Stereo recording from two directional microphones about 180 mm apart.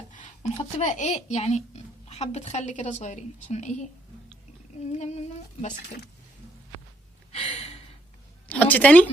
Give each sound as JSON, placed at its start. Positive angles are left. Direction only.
{"t": 0.1, "sound": "speech", "side_deg": 40}
{"t": 4.9, "sound": "speech", "side_deg": 35}
{"t": 7.3, "sound": "a sound", "side_deg": 30}
{"t": 8.4, "sound": "a woman's voice", "side_deg": 10}